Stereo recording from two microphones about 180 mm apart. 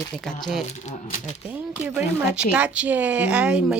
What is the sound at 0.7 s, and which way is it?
Speech, 40° left (ahead or behind).